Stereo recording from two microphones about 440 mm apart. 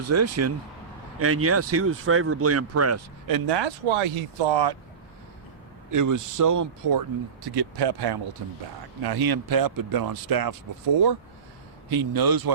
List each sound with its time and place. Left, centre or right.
0.1 s speech: right
3.2 s speech: right
3.5 s speech: right
5.9 s speech: right
7.4 s speech: right
11.9 s speech: right